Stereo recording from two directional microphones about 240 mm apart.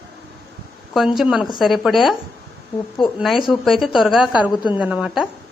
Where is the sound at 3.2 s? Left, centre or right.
Centre.